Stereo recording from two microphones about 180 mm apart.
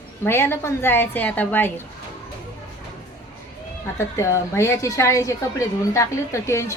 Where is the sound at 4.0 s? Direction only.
15° left (ahead or behind).